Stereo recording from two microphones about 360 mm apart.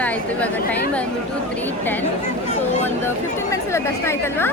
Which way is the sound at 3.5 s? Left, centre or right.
Centre.